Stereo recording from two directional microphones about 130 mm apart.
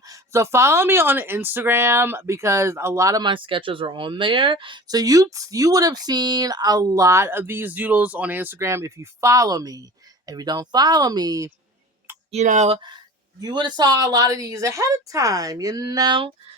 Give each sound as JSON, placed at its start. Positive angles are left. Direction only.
{"t": 0.0, "sound": "speech", "side_deg": -25}
{"t": 12.3, "sound": "speech", "side_deg": -65}
{"t": 13.4, "sound": "speech", "side_deg": -35}